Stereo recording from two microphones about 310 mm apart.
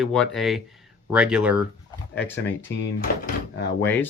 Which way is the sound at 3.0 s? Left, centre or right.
Left.